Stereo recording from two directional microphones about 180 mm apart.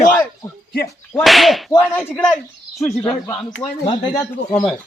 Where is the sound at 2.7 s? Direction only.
25° left (ahead or behind).